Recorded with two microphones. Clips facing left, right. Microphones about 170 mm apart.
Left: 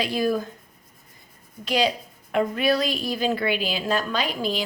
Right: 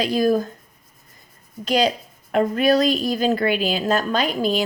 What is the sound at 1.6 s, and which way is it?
A woman's voice, 45° right (ahead or behind).